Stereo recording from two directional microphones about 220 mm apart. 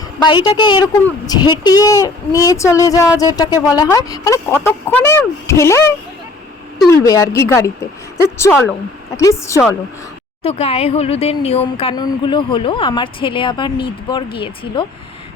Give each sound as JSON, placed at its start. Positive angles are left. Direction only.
{"t": 0.3, "sound": "speech", "side_deg": 20}
{"t": 10.4, "sound": "speech", "side_deg": 30}